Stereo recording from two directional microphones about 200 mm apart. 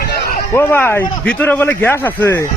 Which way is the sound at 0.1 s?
50° left (ahead or behind).